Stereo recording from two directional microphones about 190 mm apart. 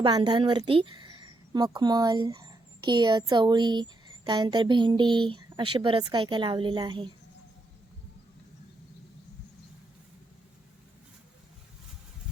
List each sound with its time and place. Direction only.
0.0 s a woman's voice: 25° right (ahead or behind)